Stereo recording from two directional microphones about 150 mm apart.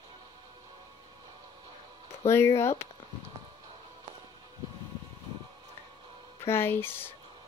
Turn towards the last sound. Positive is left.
turn(degrees=15)  # may be behind; listen again after turning